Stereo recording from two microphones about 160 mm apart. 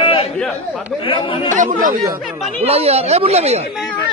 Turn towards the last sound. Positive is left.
turn(degrees=-40)  # may be behind; listen again after turning